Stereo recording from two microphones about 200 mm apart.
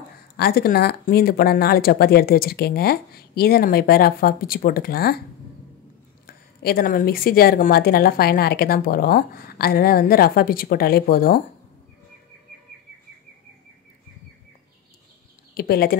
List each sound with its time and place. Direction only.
0.4 s speech: 50° left (ahead or behind)
6.2 s speech: 50° left (ahead or behind)
15.5 s speech: 50° left (ahead or behind)